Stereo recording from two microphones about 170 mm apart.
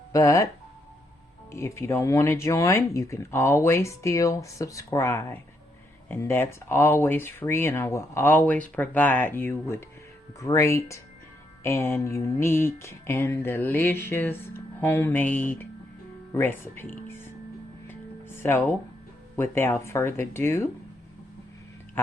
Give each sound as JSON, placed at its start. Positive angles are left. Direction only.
{"t": 0.1, "sound": "speech", "side_deg": 20}
{"t": 1.5, "sound": "speech", "side_deg": 15}
{"t": 17.8, "sound": "music", "side_deg": 15}
{"t": 19.4, "sound": "speech", "side_deg": 15}
{"t": 22.0, "sound": "speech", "side_deg": 10}